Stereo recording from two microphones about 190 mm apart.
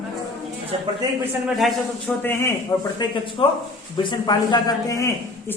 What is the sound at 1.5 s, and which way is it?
Speech, centre (ahead or behind).